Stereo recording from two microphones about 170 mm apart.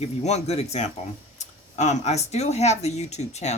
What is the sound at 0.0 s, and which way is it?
Speech, 40° left (ahead or behind).